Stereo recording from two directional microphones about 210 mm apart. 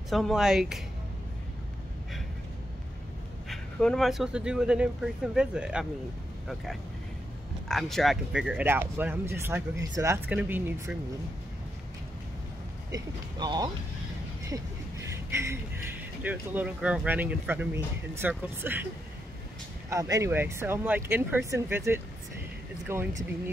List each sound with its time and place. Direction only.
0.1 s speech: centre (ahead or behind)
3.4 s speech: centre (ahead or behind)
7.6 s speech: centre (ahead or behind)
12.9 s speech: 20° right (ahead or behind)
14.5 s a sound: 15° right (ahead or behind)
16.2 s speech: 10° right (ahead or behind)
19.9 s speech: 15° right (ahead or behind)